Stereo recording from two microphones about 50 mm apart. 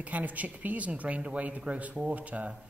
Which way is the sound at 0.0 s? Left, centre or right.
Right.